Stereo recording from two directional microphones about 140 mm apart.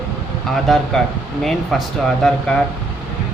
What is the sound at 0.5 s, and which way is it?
Speech, 5° left (ahead or behind).